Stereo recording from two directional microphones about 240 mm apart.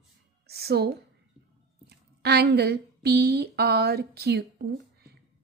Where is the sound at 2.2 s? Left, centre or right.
Right.